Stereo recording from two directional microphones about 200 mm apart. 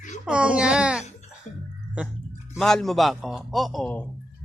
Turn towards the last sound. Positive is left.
turn(degrees=5)  # may be behind; listen again after turning